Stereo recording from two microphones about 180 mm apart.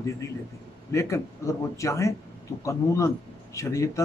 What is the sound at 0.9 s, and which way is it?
A man's voice, 15° left (ahead or behind).